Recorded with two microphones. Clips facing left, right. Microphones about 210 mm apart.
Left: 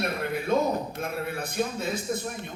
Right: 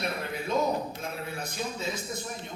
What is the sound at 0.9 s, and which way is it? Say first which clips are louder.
A man's voice: left 5 dB; 55° left (ahead or behind).